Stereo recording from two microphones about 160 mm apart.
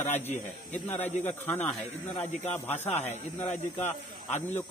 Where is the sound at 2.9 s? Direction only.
45° left (ahead or behind).